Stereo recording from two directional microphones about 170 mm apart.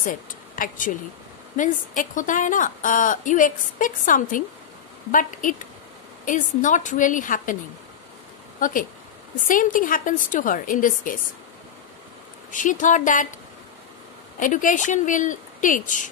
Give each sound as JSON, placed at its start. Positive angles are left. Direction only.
{"t": 0.0, "sound": "a woman's voice", "side_deg": 50}
{"t": 8.5, "sound": "a woman's voice", "side_deg": 50}
{"t": 12.4, "sound": "a woman's voice", "side_deg": 50}
{"t": 14.4, "sound": "a woman's voice", "side_deg": 50}